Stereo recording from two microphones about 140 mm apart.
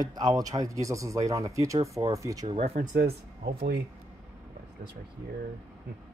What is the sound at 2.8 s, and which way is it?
Speech, 75° right (ahead or behind).